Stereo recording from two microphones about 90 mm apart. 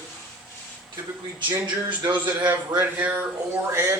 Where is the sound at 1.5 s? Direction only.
50° right (ahead or behind).